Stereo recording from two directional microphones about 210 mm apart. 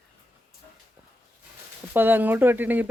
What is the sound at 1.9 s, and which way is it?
Speech, 10° right (ahead or behind).